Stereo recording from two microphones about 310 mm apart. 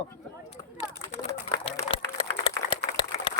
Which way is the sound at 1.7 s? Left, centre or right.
Centre.